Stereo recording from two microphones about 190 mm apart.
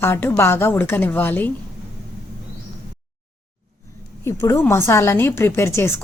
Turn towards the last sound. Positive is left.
turn(degrees=15)  # may be behind; listen again after turning